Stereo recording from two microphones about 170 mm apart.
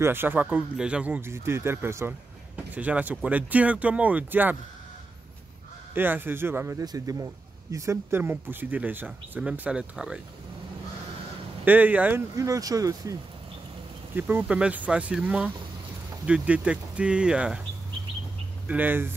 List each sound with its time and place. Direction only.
0.0 s speech: 15° right (ahead or behind)
5.9 s speech: 10° right (ahead or behind)
11.6 s speech: 10° right (ahead or behind)
18.7 s speech: 10° right (ahead or behind)